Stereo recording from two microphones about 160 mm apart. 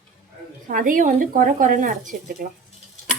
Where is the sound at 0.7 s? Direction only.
60° right (ahead or behind).